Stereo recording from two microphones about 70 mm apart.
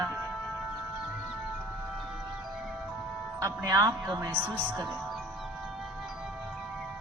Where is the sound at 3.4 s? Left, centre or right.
Right.